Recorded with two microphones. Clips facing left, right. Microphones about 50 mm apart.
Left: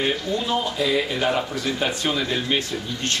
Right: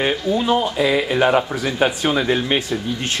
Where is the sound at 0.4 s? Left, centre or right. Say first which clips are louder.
Right 6 dB; right.